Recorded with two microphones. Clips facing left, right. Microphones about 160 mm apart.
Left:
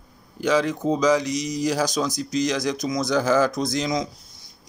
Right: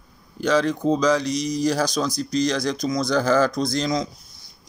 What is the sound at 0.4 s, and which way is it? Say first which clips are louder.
Speech: right 1 dB; 15° left (ahead or behind).